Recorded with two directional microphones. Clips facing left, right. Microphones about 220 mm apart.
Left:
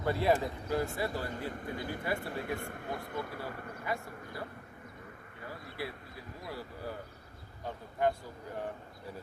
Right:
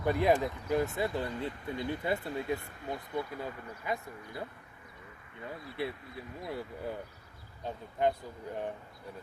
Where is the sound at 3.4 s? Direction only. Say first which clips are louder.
Right 1 dB; 20° right (ahead or behind).